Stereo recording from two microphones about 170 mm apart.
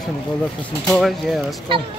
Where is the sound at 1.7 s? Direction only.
30° right (ahead or behind).